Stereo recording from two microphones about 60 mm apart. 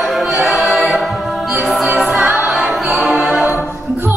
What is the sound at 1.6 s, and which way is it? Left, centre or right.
Music, centre.